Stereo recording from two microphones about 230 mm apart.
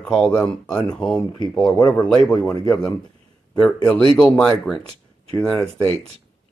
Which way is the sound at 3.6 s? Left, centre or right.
Centre.